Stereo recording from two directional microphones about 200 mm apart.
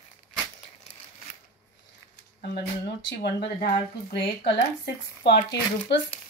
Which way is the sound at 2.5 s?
60° left (ahead or behind).